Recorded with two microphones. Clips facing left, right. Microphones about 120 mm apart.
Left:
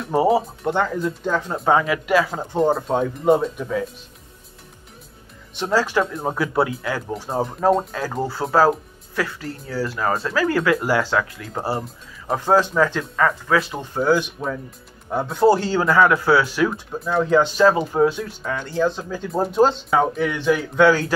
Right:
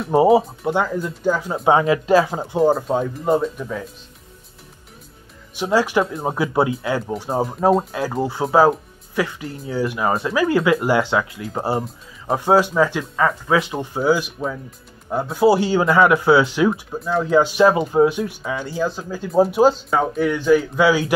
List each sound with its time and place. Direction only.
0.3 s speech: 5° right (ahead or behind)
1.7 s speech: 25° right (ahead or behind)
2.3 s speech: 5° right (ahead or behind)
5.6 s speech: 15° right (ahead or behind)
7.3 s speech: 5° right (ahead or behind)
7.9 s speech: 15° right (ahead or behind)
13.9 s speech: 5° right (ahead or behind)
16.7 s speech: centre (ahead or behind)